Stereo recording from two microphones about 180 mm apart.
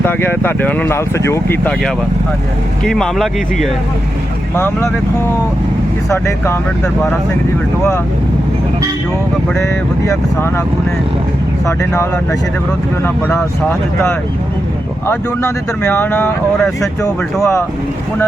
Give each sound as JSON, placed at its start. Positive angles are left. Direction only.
{"t": 0.0, "sound": "speech", "side_deg": 10}
{"t": 2.8, "sound": "speech", "side_deg": 0}
{"t": 4.5, "sound": "speech", "side_deg": 15}
{"t": 6.1, "sound": "speech", "side_deg": 15}
{"t": 11.6, "sound": "speech", "side_deg": 15}
{"t": 13.2, "sound": "speech", "side_deg": 10}
{"t": 17.4, "sound": "speech", "side_deg": 15}